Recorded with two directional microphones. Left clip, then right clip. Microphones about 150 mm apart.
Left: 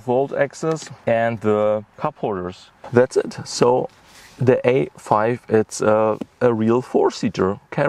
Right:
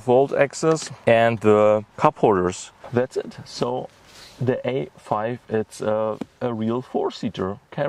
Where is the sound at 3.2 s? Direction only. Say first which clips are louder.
Left 8 dB; 55° left (ahead or behind).